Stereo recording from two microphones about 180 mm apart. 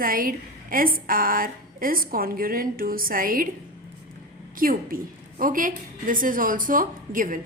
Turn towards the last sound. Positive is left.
turn(degrees=-50)  # may be behind; listen again after turning